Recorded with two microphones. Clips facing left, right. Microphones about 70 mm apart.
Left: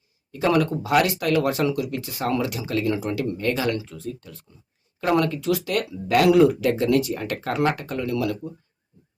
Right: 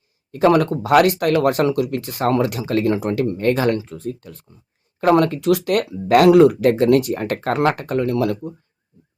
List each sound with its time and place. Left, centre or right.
0.3 s speech: right